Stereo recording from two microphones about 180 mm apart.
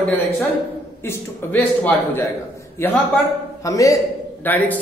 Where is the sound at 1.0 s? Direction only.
10° left (ahead or behind).